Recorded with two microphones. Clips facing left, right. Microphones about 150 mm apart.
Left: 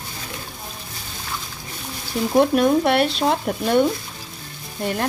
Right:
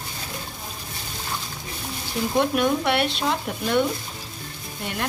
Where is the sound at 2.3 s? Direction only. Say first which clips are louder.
Left 6 dB; 35° left (ahead or behind).